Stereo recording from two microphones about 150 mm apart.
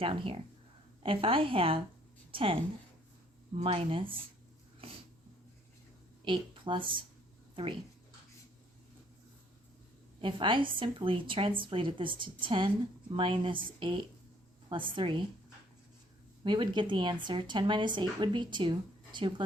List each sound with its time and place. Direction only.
0.0 s a woman's voice: 35° right (ahead or behind)
3.6 s a woman's voice: 40° right (ahead or behind)
6.2 s a woman's voice: 35° right (ahead or behind)
10.2 s a woman's voice: 35° right (ahead or behind)
16.4 s a woman's voice: 30° right (ahead or behind)